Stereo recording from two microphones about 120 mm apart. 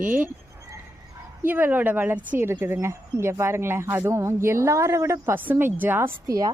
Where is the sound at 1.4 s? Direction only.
15° right (ahead or behind).